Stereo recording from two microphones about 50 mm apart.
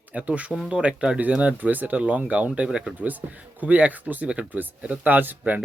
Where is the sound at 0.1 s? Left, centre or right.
Right.